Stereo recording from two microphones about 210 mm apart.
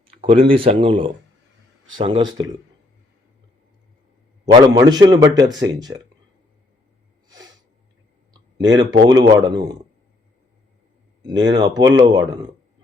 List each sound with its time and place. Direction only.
0.2 s speech: 25° right (ahead or behind)
4.5 s speech: 20° right (ahead or behind)
8.7 s speech: 20° right (ahead or behind)
11.4 s speech: 20° right (ahead or behind)